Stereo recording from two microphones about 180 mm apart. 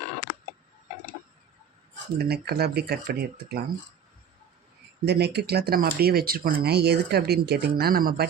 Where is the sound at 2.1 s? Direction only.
60° right (ahead or behind).